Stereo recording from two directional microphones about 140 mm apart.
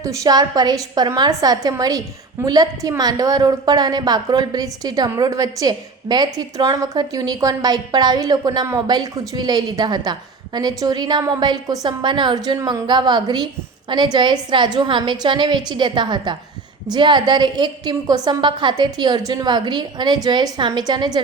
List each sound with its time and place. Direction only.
0.0 s a woman's voice: 25° right (ahead or behind)